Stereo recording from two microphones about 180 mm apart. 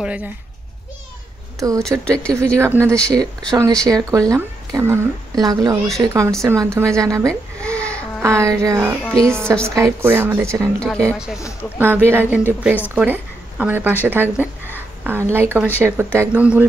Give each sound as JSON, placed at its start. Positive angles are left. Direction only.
{"t": 0.0, "sound": "speech", "side_deg": -5}
{"t": 1.8, "sound": "speech", "side_deg": 5}
{"t": 2.6, "sound": "a woman's voice", "side_deg": -15}
{"t": 7.6, "sound": "a sound", "side_deg": 5}
{"t": 8.2, "sound": "a woman's voice", "side_deg": -15}
{"t": 11.8, "sound": "speech", "side_deg": -10}